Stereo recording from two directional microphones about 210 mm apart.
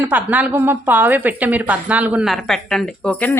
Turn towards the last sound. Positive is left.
turn(degrees=5)  # may be behind; listen again after turning